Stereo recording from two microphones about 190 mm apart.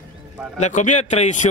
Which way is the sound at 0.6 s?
40° left (ahead or behind).